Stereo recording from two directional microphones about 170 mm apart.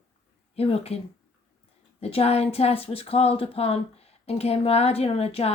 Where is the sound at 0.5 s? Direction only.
35° left (ahead or behind).